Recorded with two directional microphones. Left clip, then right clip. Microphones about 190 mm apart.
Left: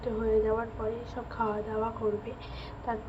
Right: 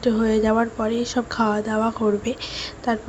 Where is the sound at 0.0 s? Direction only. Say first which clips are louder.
Right 8 dB; 45° right (ahead or behind).